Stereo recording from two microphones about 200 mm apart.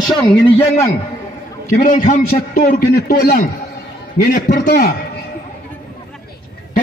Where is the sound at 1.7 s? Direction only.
40° left (ahead or behind).